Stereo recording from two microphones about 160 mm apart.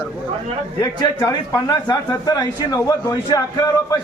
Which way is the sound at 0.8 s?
25° left (ahead or behind).